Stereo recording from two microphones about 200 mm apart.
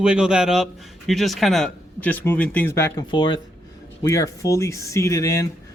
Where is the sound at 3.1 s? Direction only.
20° left (ahead or behind).